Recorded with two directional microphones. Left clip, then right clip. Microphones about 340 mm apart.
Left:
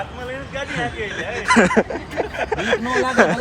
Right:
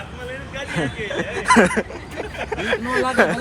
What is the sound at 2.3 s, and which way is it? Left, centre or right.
Speech, centre.